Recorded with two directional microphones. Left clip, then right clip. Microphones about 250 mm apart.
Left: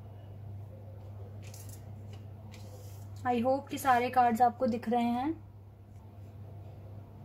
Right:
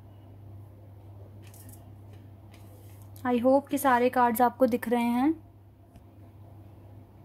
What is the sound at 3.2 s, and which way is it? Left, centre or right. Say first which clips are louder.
A woman's voice: right 6 dB; right.